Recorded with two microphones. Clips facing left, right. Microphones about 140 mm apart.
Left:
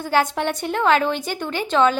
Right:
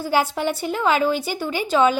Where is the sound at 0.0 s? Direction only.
10° right (ahead or behind).